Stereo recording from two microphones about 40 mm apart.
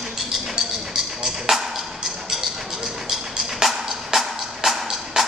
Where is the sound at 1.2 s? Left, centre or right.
Centre.